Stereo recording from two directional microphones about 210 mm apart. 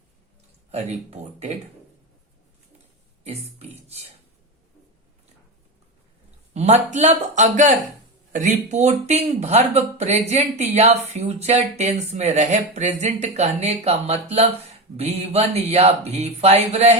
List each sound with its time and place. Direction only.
0.7 s speech: 30° right (ahead or behind)
6.5 s speech: 30° right (ahead or behind)